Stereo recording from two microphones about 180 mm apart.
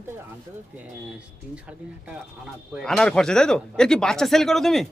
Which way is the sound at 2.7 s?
Centre (ahead or behind).